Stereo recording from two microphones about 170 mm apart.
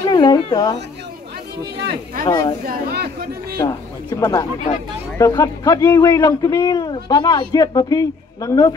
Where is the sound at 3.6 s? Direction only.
20° left (ahead or behind).